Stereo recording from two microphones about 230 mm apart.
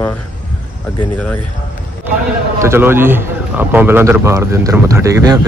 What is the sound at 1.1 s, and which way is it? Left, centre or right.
Speech, centre.